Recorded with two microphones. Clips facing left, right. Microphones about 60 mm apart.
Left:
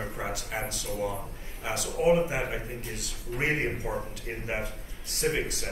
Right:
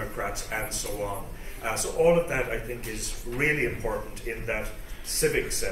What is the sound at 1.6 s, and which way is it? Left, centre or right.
A man's voice, right.